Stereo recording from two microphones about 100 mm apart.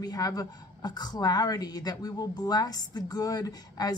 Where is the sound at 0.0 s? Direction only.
40° left (ahead or behind).